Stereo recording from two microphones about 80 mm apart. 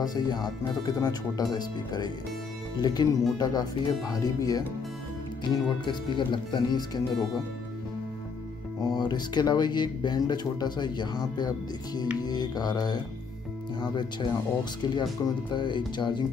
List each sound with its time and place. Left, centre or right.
0.0 s speech: left
5.4 s speech: left
8.8 s speech: left